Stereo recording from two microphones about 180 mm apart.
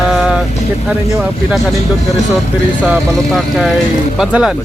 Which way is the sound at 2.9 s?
Centre (ahead or behind).